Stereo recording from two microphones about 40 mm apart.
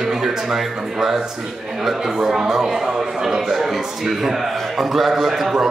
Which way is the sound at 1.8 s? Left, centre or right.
Centre.